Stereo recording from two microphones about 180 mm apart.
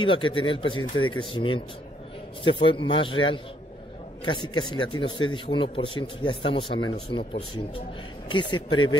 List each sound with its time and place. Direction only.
0.0 s a man's voice: 30° left (ahead or behind)
8.3 s a man's voice: 25° left (ahead or behind)